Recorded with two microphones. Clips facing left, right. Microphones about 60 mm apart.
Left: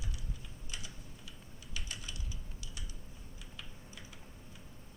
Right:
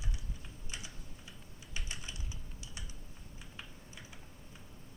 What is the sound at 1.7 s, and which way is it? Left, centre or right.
Typing, right.